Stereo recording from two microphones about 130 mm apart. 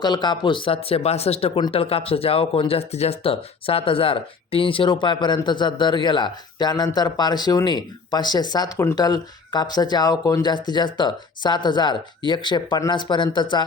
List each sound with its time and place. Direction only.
0.0 s speech: 35° left (ahead or behind)